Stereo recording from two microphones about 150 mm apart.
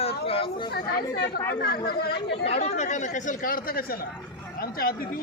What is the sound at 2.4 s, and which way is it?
Speech, 45° left (ahead or behind).